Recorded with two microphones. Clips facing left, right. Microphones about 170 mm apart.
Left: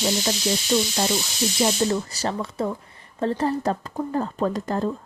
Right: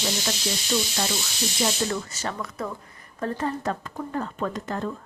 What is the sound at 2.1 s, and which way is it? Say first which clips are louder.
A woman's voice: left 5 dB; 35° left (ahead or behind).